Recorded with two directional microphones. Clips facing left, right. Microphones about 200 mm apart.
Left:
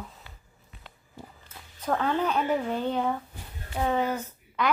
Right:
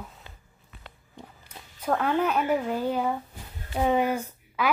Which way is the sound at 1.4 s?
15° right (ahead or behind).